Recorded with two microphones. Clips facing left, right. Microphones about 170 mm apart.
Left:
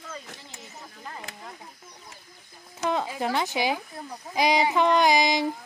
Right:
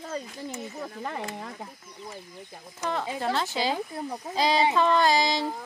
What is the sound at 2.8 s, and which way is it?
Speech, 15° left (ahead or behind).